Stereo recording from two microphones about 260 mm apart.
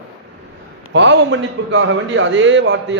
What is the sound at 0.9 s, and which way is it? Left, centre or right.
A man's voice, right.